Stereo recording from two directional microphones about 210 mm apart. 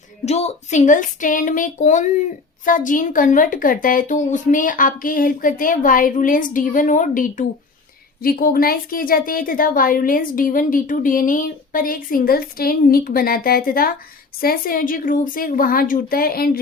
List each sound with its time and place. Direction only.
0.3 s speech: 30° left (ahead or behind)